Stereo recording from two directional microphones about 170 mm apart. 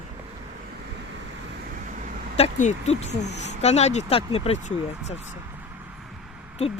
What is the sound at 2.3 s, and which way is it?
Speech, 40° left (ahead or behind).